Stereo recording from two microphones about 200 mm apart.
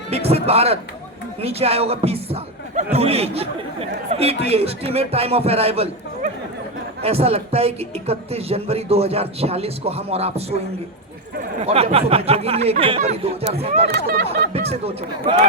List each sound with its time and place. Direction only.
0.1 s a man's voice: 30° right (ahead or behind)
11.6 s a man's voice: 30° right (ahead or behind)
13.8 s speech: 55° right (ahead or behind)
14.5 s speech: 30° right (ahead or behind)